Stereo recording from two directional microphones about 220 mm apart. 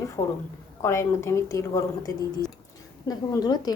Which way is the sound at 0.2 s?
15° left (ahead or behind).